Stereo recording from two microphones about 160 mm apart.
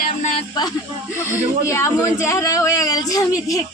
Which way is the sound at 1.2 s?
15° left (ahead or behind).